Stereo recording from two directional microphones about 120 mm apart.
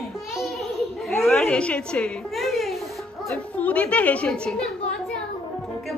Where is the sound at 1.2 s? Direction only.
5° left (ahead or behind).